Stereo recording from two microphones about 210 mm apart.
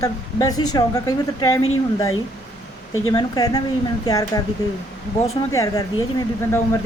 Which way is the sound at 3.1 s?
20° left (ahead or behind).